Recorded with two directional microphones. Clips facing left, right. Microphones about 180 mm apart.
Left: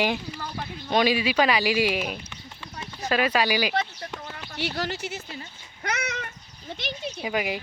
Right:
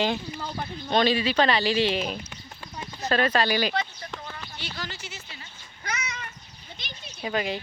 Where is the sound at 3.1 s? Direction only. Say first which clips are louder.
Even; 10° left (ahead or behind).